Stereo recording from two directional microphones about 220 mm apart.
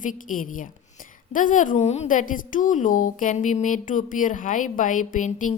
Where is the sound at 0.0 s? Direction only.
35° left (ahead or behind).